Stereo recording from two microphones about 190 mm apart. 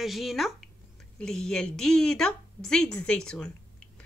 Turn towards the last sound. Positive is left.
turn(degrees=5)  # may be behind; listen again after turning